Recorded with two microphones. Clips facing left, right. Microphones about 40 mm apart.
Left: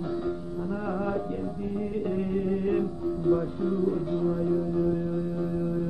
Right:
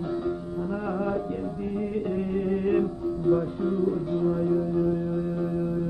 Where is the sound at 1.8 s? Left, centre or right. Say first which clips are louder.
Right 1 dB; centre.